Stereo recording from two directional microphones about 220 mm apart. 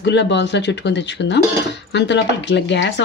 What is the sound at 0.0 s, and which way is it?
Speech, 55° left (ahead or behind).